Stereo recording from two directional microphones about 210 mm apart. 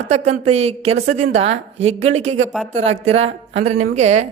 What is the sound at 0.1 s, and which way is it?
Speech, 30° right (ahead or behind).